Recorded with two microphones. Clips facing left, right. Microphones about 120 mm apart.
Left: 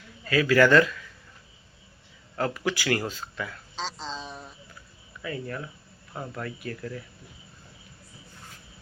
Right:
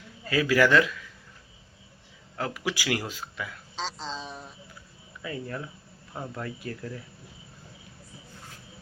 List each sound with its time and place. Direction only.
0.3 s a man's voice: 15° right (ahead or behind)
2.3 s a man's voice: 5° right (ahead or behind)
5.2 s speech: 20° right (ahead or behind)